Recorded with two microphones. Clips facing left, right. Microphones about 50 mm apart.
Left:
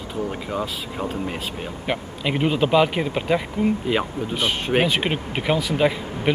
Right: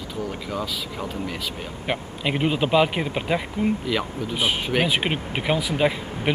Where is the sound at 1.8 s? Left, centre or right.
Centre.